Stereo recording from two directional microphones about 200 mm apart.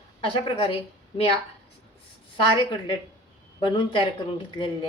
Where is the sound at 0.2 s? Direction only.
25° left (ahead or behind).